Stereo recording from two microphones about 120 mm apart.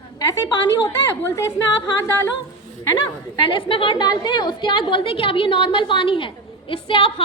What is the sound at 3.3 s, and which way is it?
A woman's voice, 45° left (ahead or behind).